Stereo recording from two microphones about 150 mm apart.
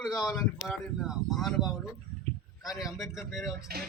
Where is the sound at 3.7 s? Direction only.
90° right.